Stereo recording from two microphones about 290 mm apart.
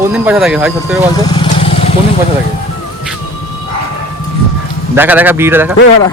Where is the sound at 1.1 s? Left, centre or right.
Centre.